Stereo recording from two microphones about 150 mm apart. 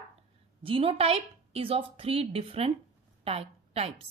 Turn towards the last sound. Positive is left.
turn(degrees=-40)  # may be behind; listen again after turning